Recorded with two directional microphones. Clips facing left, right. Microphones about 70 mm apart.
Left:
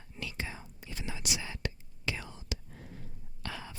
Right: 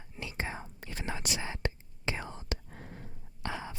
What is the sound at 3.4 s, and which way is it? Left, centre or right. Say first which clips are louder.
Whispering: right 4 dB; right.